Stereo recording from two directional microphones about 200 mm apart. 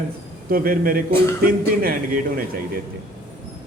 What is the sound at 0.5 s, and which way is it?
A man's voice, 45° right (ahead or behind).